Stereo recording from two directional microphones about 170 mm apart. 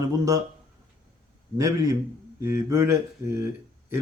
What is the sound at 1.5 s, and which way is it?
A man's voice, 20° right (ahead or behind).